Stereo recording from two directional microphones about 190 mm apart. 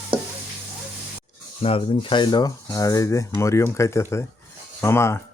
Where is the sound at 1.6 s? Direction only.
30° left (ahead or behind).